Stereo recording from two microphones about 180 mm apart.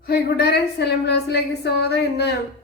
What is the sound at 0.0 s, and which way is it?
A woman's voice, 60° left (ahead or behind).